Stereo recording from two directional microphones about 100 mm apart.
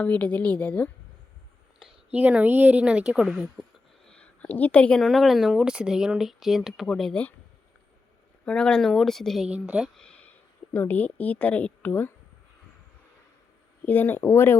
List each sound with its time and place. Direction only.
0.0 s a woman's voice: 15° left (ahead or behind)
2.1 s a woman's voice: 15° right (ahead or behind)
4.0 s a sound: 10° left (ahead or behind)
5.0 s speech: centre (ahead or behind)
8.4 s speech: 10° left (ahead or behind)
9.5 s a woman's voice: 10° right (ahead or behind)
10.0 s a sound: 10° left (ahead or behind)
10.8 s a woman's voice: 15° left (ahead or behind)
13.8 s speech: 20° left (ahead or behind)